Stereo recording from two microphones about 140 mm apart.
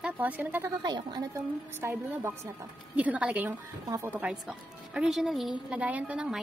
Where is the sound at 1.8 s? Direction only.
15° right (ahead or behind).